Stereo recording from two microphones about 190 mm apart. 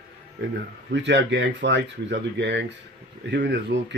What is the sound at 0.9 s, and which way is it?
Speech, 70° right (ahead or behind).